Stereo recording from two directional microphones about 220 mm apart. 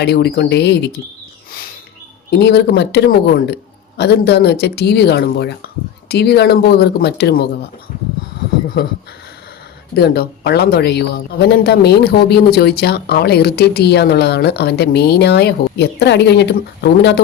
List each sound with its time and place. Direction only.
0.0 s speech: 50° left (ahead or behind)
2.3 s speech: 50° left (ahead or behind)
9.9 s speech: 50° left (ahead or behind)